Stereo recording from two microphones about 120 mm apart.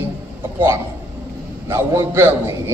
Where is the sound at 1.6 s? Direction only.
20° right (ahead or behind).